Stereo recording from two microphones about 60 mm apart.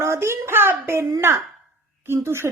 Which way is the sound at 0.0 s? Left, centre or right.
Right.